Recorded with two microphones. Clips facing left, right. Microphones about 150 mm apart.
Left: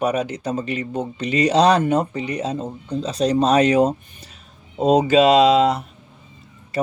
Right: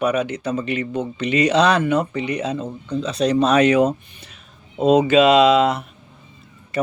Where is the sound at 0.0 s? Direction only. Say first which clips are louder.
Right 1 dB; 40° left (ahead or behind).